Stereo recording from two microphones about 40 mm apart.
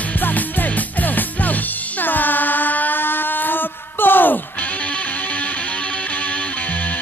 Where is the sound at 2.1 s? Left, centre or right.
Left.